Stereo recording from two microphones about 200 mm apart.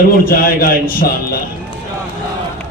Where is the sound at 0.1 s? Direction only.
45° left (ahead or behind).